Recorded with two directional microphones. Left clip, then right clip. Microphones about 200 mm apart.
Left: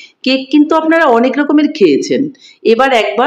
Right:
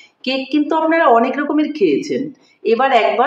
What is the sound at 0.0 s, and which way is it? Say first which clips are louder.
A woman's voice: left 6 dB; 60° left (ahead or behind).